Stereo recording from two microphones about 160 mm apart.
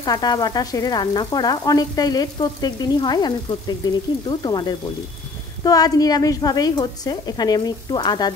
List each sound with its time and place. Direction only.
0.0 s frying: 25° left (ahead or behind)